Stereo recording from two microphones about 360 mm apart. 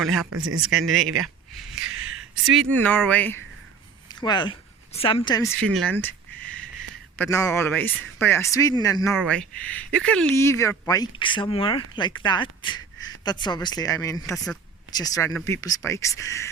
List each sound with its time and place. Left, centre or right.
0.0 s speech: centre
0.3 s speech: right
0.7 s speech: centre
1.0 s speech: right
1.9 s a sound: right
2.5 s speech: centre